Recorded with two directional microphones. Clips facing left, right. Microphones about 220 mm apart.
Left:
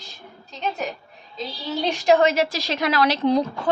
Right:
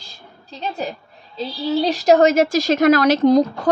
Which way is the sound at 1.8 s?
35° right (ahead or behind).